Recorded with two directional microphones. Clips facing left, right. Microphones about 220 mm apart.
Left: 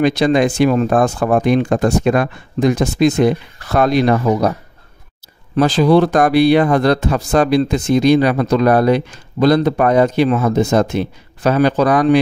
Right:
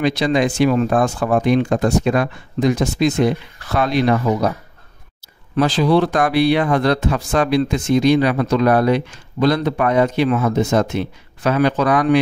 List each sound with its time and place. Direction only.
0.0 s speech: 50° left (ahead or behind)
5.6 s speech: 45° left (ahead or behind)